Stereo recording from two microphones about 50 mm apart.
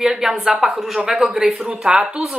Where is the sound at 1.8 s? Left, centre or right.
Centre.